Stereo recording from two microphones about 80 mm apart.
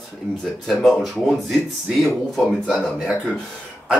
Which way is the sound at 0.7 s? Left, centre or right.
Centre.